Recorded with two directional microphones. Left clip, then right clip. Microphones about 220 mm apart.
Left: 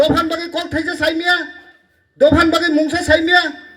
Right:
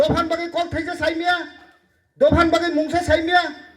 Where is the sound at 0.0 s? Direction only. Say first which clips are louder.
Left 4 dB; 50° left (ahead or behind).